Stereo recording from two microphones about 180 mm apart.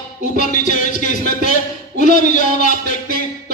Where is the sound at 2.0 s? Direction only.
45° left (ahead or behind).